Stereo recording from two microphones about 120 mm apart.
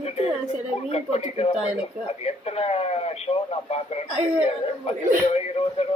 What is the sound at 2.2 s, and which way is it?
Radio, 60° left (ahead or behind).